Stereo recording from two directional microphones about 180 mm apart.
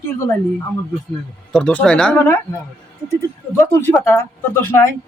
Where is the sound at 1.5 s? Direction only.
5° left (ahead or behind).